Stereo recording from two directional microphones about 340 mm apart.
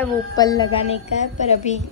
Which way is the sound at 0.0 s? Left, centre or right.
Centre.